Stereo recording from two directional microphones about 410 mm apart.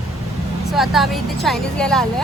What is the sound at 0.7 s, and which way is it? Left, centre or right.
Speech, centre.